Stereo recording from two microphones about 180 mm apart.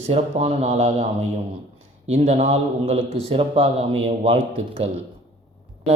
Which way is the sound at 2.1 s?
35° right (ahead or behind).